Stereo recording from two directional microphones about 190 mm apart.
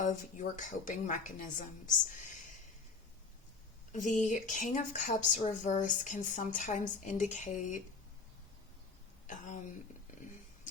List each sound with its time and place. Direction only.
0.0 s speech: 40° left (ahead or behind)
3.9 s speech: 40° left (ahead or behind)
9.2 s speech: 40° left (ahead or behind)